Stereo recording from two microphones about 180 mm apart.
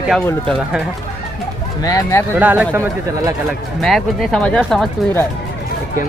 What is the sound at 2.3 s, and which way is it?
Speech, 10° right (ahead or behind).